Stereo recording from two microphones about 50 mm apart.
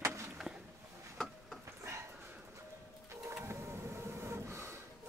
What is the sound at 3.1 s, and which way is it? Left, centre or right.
Printer, right.